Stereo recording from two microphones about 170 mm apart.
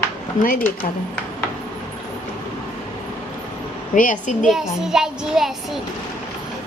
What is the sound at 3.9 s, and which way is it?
Speech, 50° left (ahead or behind).